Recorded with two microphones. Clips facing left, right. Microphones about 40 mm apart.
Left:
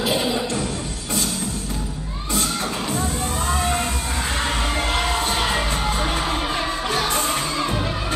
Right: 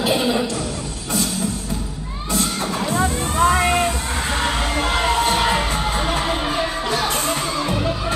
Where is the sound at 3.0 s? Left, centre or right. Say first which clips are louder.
Right 6 dB; right.